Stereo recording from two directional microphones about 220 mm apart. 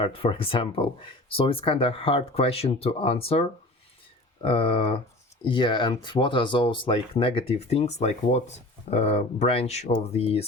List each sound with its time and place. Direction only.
0.0 s speech: 25° left (ahead or behind)